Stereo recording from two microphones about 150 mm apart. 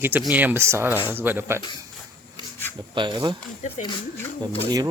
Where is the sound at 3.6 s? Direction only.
55° left (ahead or behind).